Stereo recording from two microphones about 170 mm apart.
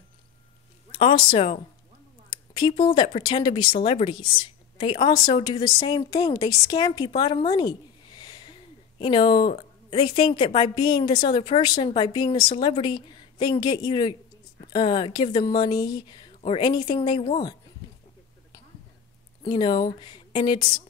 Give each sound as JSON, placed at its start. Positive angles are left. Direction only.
{"t": 0.9, "sound": "a woman's voice", "side_deg": 30}
{"t": 7.2, "sound": "a sound", "side_deg": 25}
{"t": 9.0, "sound": "a woman's voice", "side_deg": 30}
{"t": 19.4, "sound": "a woman's voice", "side_deg": 25}